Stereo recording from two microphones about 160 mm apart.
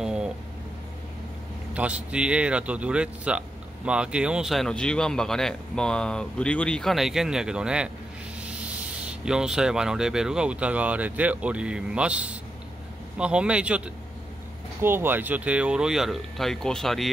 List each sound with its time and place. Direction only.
0.0 s a sound: 5° right (ahead or behind)
1.7 s speech: 10° right (ahead or behind)
9.2 s speech: 5° right (ahead or behind)